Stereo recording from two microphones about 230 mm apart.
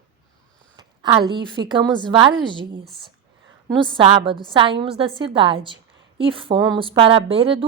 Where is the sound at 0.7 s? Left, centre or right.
Centre.